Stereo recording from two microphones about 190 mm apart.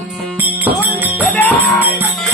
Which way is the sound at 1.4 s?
10° left (ahead or behind).